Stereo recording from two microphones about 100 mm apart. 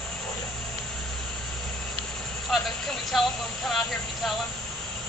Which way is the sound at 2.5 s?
Centre (ahead or behind).